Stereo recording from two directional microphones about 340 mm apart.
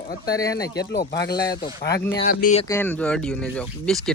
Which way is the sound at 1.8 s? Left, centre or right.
Left.